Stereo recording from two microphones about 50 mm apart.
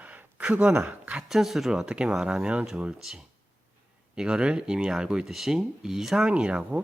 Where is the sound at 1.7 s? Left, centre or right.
Centre.